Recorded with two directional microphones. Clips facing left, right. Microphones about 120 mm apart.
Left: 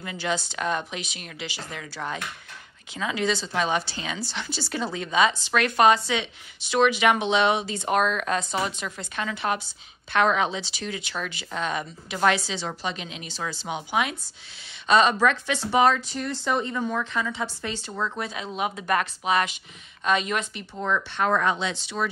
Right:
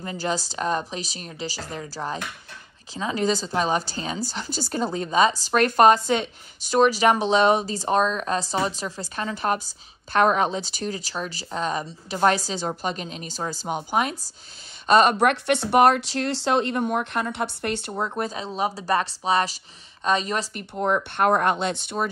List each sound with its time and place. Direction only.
0.0 s speech: 40° right (ahead or behind)
15.2 s speech: 60° right (ahead or behind)
17.9 s speech: 35° right (ahead or behind)
21.4 s speech: 55° right (ahead or behind)